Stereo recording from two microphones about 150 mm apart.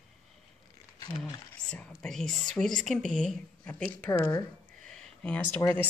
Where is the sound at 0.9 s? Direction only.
30° left (ahead or behind).